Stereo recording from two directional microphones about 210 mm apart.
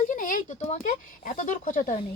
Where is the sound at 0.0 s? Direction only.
40° left (ahead or behind).